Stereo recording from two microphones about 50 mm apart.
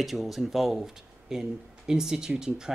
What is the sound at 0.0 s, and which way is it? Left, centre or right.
Speech, centre.